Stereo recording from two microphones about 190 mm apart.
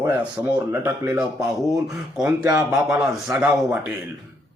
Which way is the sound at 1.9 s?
5° right (ahead or behind).